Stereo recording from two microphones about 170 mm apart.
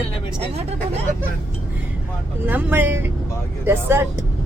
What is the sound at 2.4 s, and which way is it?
Speech, 10° right (ahead or behind).